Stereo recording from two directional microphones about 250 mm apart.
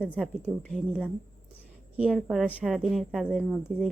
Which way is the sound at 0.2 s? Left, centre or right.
Centre.